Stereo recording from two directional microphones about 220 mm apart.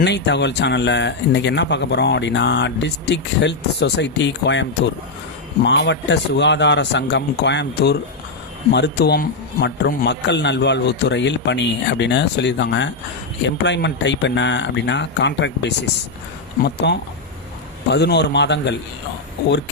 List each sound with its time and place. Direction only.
0.0 s speech: 50° left (ahead or behind)
5.6 s speech: 55° left (ahead or behind)